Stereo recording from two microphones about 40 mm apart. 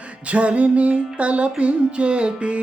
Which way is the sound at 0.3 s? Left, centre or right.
Right.